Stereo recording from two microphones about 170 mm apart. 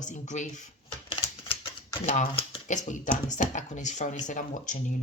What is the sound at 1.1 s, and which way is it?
Typewriter, 30° left (ahead or behind).